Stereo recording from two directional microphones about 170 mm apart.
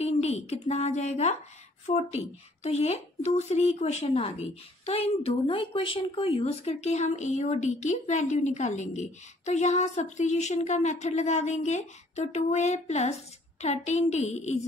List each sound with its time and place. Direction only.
0.0 s speech: 40° left (ahead or behind)